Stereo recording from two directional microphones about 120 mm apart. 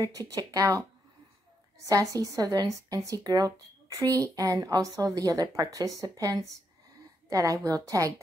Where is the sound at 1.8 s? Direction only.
30° right (ahead or behind).